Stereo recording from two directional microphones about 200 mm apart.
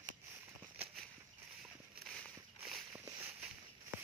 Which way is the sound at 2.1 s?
Centre (ahead or behind).